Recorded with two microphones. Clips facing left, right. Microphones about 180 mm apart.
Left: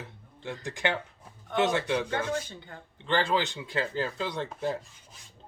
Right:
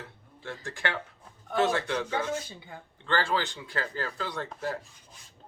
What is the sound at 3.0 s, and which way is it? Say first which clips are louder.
Speech: left 2 dB; 20° left (ahead or behind).